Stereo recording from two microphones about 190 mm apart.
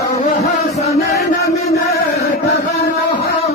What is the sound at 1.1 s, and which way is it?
Chant, 55° left (ahead or behind).